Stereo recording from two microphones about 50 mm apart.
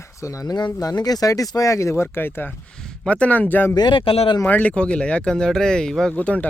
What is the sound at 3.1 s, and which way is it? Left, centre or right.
Speech, left.